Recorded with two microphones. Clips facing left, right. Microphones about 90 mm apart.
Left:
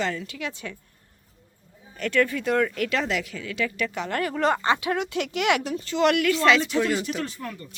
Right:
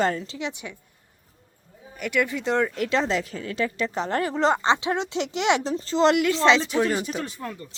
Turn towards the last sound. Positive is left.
turn(degrees=-20)  # may be behind; listen again after turning